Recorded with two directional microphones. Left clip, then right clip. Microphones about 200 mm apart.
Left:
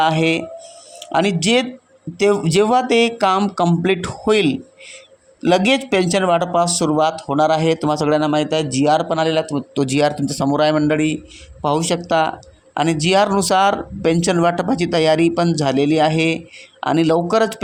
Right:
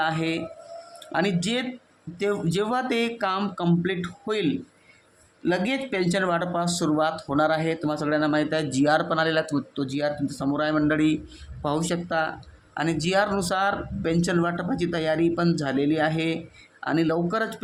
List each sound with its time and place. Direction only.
0.0 s a man's voice: 30° left (ahead or behind); by 9.6 s 15° left (ahead or behind)
9.7 s a man's voice: 35° left (ahead or behind)